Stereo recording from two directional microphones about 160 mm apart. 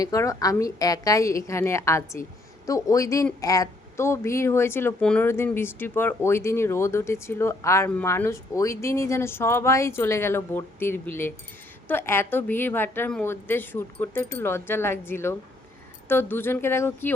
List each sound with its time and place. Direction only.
0.0 s a woman's voice: 20° left (ahead or behind)